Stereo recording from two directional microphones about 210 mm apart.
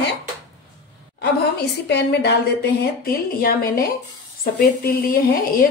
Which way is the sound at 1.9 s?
55° left (ahead or behind).